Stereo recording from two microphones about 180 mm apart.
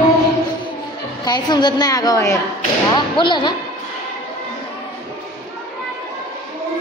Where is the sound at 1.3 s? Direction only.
25° left (ahead or behind).